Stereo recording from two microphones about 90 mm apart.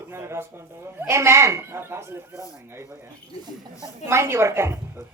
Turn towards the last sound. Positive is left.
turn(degrees=-30)  # may be behind; listen again after turning